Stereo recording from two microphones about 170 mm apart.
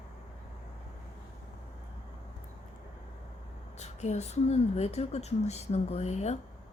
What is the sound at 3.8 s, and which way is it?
A woman's voice, 40° left (ahead or behind).